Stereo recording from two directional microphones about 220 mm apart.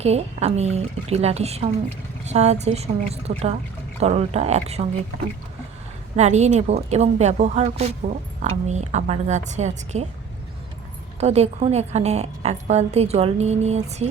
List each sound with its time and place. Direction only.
0.0 s a woman's voice: 30° right (ahead or behind)
6.1 s a woman's voice: 30° right (ahead or behind)
11.2 s a woman's voice: 30° right (ahead or behind)